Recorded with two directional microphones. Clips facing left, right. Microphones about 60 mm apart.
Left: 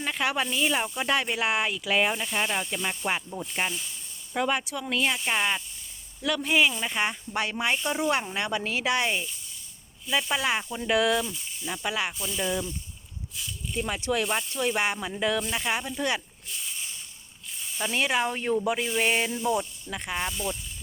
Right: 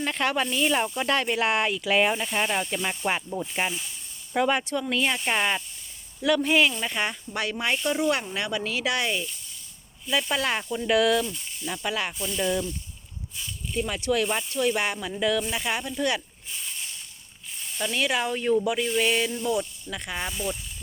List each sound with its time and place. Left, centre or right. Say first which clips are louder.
0.0 s speech: right 2 dB; centre
7.0 s speech: left 2 dB; centre
10.1 s speech: right 1 dB; centre
13.8 s speech: right 2 dB; centre
14.3 s speech: right 2 dB; centre
17.7 s speech: even; centre